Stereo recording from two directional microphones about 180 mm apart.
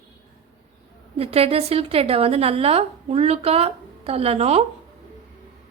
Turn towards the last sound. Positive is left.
turn(degrees=-35)  # may be behind; listen again after turning